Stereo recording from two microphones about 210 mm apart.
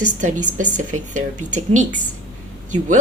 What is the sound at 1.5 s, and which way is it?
Speech, 35° right (ahead or behind).